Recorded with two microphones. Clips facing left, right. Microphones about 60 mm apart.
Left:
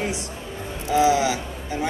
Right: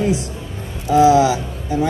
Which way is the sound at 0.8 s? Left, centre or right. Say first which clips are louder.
Right 7 dB; right.